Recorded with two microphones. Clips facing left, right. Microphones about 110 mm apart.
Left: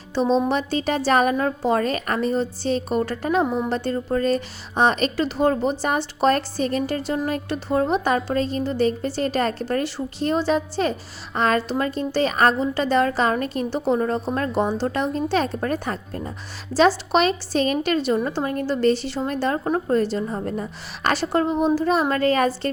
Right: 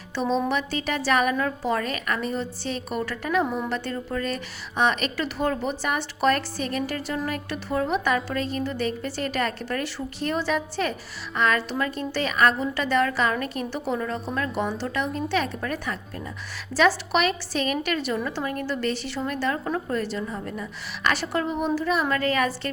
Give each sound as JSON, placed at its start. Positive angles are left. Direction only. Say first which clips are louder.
{"t": 0.1, "sound": "a woman's voice", "louder": "left 4 dB", "side_deg": 30}